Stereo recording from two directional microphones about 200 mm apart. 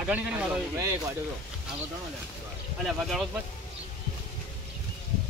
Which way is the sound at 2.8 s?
Centre (ahead or behind).